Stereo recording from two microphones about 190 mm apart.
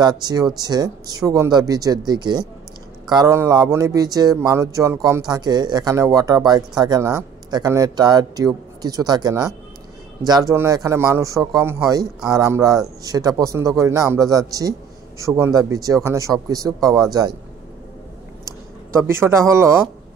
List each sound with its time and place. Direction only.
0.0 s speech: 20° right (ahead or behind)
18.9 s speech: 15° right (ahead or behind)